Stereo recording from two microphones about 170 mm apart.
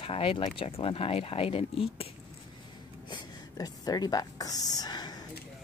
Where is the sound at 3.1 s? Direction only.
25° left (ahead or behind).